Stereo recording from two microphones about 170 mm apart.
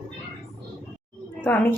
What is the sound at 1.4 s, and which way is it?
Speech, 10° left (ahead or behind).